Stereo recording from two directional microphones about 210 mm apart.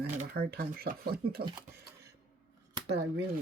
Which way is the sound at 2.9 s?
50° right (ahead or behind).